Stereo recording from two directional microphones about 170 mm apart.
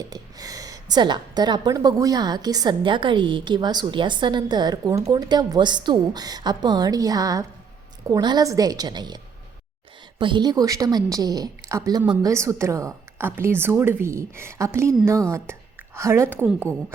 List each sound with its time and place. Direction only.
0.1 s a woman's voice: 20° right (ahead or behind)
16.0 s a woman's voice: 15° right (ahead or behind)